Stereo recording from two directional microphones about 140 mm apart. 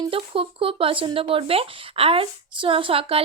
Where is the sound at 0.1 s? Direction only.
40° right (ahead or behind).